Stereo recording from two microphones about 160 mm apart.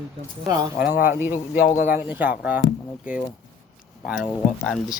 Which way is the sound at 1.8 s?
15° right (ahead or behind).